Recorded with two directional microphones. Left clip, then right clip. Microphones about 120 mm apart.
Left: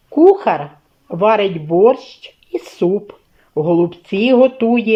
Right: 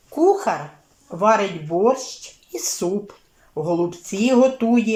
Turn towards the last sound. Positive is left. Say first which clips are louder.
# left 5 dB
turn(degrees=20)  # may be behind; listen again after turning